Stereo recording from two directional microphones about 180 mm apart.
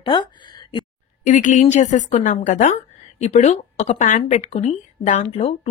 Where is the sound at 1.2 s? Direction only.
45° left (ahead or behind).